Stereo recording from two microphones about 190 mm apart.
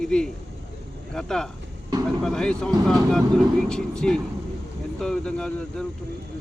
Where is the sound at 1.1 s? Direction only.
5° left (ahead or behind).